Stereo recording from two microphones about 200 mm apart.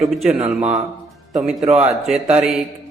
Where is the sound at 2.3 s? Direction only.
5° right (ahead or behind).